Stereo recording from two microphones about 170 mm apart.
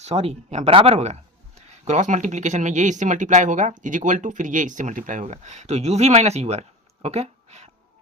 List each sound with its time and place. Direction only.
0.0 s speech: 40° right (ahead or behind)